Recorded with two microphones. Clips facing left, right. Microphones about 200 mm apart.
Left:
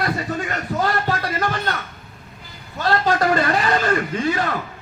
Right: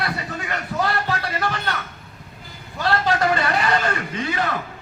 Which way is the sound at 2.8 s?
40° left (ahead or behind).